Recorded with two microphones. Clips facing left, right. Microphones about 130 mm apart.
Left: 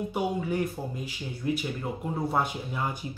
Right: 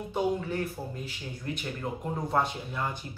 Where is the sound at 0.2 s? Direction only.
10° left (ahead or behind).